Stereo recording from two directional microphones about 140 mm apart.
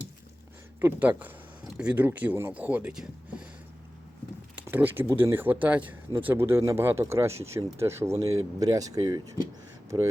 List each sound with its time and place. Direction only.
0.8 s speech: 15° right (ahead or behind)
4.5 s a sound: 15° right (ahead or behind)
5.1 s speech: 15° right (ahead or behind); by 10.1 s 30° right (ahead or behind)